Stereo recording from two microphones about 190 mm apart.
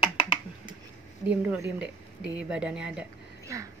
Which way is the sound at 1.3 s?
5° right (ahead or behind).